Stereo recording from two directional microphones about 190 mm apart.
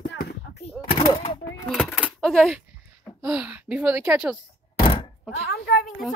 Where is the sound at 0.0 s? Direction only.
55° left (ahead or behind).